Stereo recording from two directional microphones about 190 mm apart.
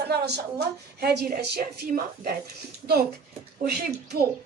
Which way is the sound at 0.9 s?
55° right (ahead or behind).